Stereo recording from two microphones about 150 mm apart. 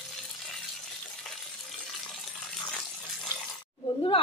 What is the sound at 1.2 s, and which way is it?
Water, centre (ahead or behind).